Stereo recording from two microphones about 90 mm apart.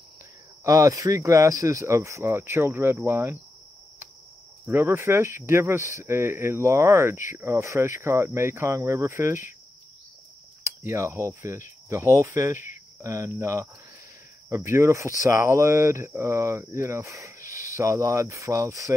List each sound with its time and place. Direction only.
0.7 s speech: 40° right (ahead or behind)
4.6 s speech: 25° right (ahead or behind)
10.8 s speech: 30° right (ahead or behind)